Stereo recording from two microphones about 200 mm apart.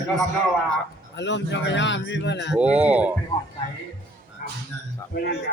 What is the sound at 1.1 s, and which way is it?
A man's voice, 60° left (ahead or behind).